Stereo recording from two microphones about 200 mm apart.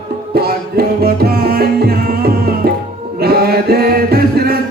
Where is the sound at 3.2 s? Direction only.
50° right (ahead or behind).